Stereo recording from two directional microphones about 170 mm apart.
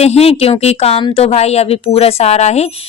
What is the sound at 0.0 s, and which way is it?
A woman's voice, 40° left (ahead or behind).